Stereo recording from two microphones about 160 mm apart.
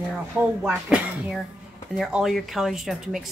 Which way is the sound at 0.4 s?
5° right (ahead or behind).